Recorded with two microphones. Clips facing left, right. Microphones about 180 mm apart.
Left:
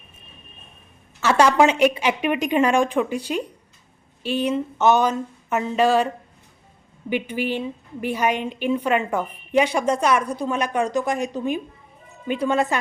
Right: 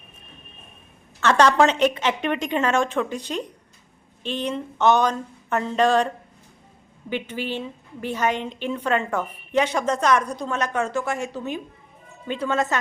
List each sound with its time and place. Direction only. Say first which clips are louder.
1.2 s a woman's voice: left 1 dB; 10° left (ahead or behind)
7.1 s a woman's voice: left 4 dB; 15° left (ahead or behind)